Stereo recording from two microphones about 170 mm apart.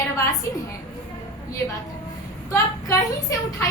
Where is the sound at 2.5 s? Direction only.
20° left (ahead or behind).